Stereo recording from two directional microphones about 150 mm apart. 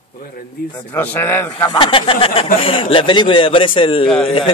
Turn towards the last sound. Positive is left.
turn(degrees=35)  # may be behind; listen again after turning